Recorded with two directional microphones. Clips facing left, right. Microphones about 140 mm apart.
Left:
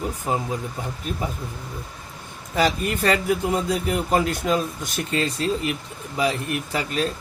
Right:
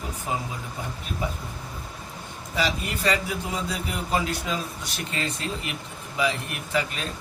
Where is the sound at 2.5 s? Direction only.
50° left (ahead or behind).